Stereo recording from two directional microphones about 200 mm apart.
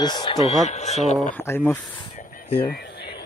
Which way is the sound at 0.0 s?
20° left (ahead or behind).